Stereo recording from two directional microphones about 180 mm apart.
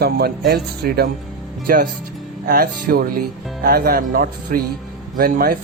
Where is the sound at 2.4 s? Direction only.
55° right (ahead or behind).